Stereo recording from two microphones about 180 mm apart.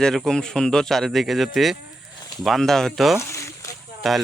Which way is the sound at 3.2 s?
15° left (ahead or behind).